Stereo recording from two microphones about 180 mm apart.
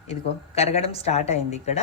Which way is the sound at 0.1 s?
35° left (ahead or behind).